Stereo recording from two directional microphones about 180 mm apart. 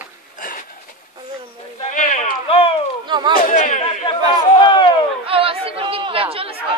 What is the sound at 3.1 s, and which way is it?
Chatter, 25° right (ahead or behind).